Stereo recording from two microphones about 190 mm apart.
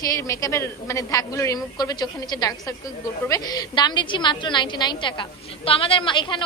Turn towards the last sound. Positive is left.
turn(degrees=25)  # may be behind; listen again after turning